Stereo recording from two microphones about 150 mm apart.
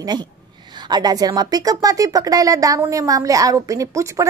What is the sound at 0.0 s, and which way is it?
A woman's voice, 25° right (ahead or behind).